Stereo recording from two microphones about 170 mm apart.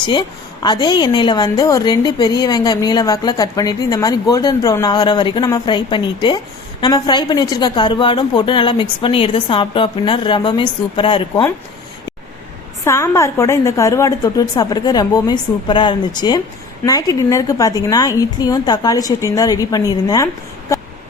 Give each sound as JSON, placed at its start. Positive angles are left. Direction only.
{"t": 0.1, "sound": "a woman's voice", "side_deg": 25}
{"t": 12.8, "sound": "a woman's voice", "side_deg": 15}
{"t": 20.7, "sound": "a sound", "side_deg": 20}